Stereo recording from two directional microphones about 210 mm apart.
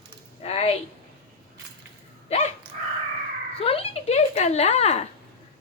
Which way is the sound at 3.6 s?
30° left (ahead or behind).